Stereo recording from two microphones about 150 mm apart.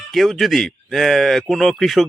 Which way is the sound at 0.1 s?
Centre (ahead or behind).